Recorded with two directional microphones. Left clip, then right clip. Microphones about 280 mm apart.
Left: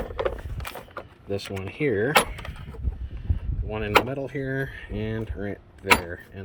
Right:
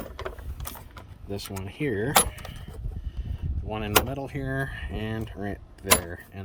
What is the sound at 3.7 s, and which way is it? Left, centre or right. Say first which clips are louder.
Speech: left 3 dB; centre.